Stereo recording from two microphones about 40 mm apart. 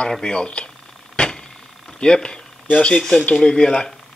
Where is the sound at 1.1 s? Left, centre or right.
Left.